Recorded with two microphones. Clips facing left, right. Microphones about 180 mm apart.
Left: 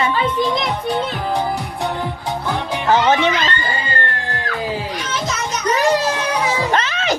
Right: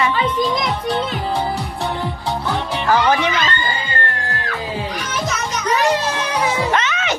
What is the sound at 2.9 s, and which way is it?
Speech, 25° left (ahead or behind).